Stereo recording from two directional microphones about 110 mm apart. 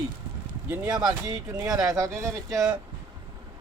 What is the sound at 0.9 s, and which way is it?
Speech, 35° right (ahead or behind).